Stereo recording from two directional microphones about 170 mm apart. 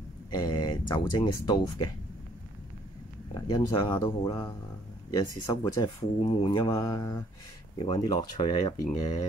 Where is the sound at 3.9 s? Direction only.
15° left (ahead or behind).